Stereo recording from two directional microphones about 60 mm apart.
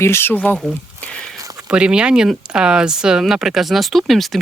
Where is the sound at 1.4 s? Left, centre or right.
Right.